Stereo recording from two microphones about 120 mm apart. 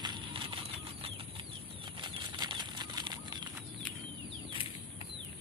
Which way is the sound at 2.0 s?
40° right (ahead or behind).